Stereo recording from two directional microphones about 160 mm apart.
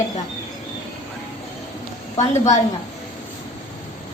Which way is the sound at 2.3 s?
45° left (ahead or behind).